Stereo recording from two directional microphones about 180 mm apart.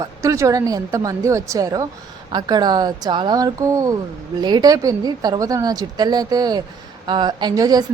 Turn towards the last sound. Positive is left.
turn(degrees=-20)  # may be behind; listen again after turning